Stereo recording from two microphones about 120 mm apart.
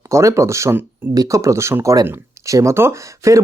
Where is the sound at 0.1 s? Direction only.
25° right (ahead or behind).